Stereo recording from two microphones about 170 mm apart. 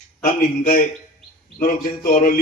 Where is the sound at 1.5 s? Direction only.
55° left (ahead or behind).